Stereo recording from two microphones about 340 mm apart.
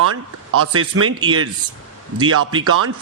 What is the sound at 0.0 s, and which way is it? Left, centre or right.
A man's voice, right.